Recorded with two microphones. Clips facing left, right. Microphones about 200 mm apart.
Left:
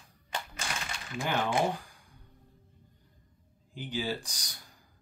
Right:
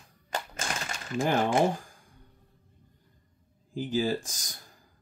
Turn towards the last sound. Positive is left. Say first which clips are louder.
# right 5 dB
turn(degrees=-45)  # may be behind; listen again after turning